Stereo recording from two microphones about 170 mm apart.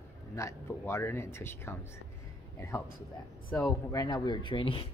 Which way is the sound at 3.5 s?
20° left (ahead or behind).